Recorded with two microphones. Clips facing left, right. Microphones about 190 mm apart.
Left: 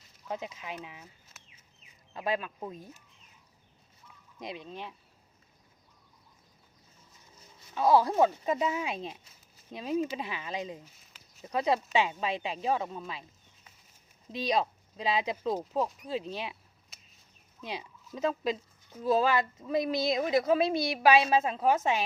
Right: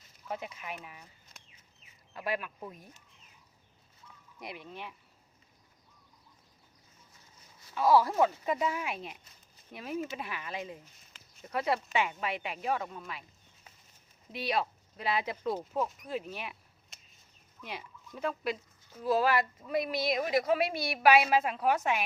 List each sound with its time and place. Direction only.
0.3 s speech: 20° left (ahead or behind)
2.1 s speech: 20° left (ahead or behind)
4.4 s speech: 20° left (ahead or behind)
7.7 s speech: 20° left (ahead or behind)
10.9 s a sound: centre (ahead or behind)
11.4 s speech: 20° left (ahead or behind)
14.3 s speech: 20° left (ahead or behind)
16.9 s a sound: centre (ahead or behind)
17.6 s speech: 15° left (ahead or behind)